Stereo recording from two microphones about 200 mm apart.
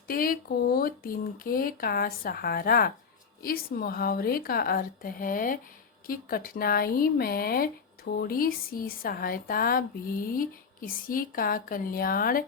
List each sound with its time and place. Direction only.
0.1 s speech: 45° left (ahead or behind)